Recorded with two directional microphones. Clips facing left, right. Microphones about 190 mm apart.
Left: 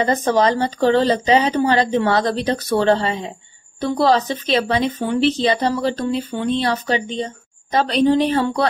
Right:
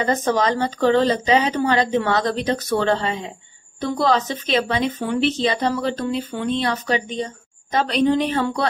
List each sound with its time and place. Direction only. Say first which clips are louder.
0.0 s speech: left 3 dB; 30° left (ahead or behind)